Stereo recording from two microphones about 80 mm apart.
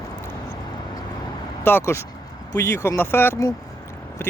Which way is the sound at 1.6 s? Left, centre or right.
Left.